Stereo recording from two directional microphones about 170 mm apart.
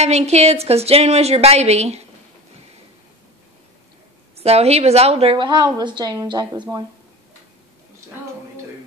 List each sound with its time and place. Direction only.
0.0 s a woman's voice: 40° right (ahead or behind)
4.4 s a woman's voice: 40° right (ahead or behind)